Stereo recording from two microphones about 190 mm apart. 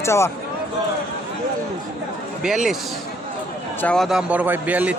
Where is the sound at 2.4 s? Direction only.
5° right (ahead or behind).